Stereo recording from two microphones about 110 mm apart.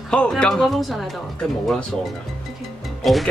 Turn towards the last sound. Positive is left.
turn(degrees=0)  # may be behind; listen again after turning